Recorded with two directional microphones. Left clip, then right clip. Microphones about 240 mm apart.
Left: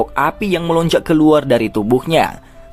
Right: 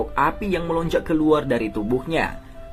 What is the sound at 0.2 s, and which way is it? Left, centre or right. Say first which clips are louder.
Speech: left 2 dB; left.